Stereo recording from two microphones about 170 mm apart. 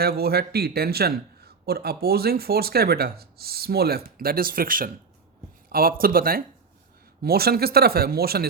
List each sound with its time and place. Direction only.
0.0 s a man's voice: 65° right (ahead or behind)